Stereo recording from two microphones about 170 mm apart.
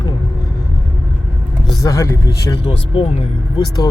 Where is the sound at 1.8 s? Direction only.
20° left (ahead or behind).